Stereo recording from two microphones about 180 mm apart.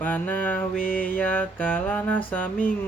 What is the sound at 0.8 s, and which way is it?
Music, 50° left (ahead or behind).